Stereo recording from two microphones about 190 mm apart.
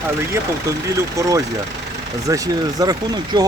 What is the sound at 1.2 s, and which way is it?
Speech, 15° right (ahead or behind).